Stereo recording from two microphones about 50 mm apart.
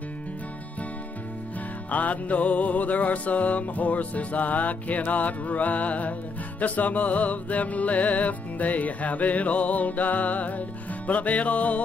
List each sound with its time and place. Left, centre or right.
1.9 s music: left